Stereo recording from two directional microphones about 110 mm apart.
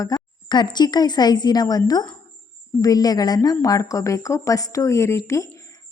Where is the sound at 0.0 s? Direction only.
40° left (ahead or behind).